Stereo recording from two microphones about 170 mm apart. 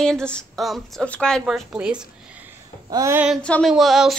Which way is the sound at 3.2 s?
Centre (ahead or behind).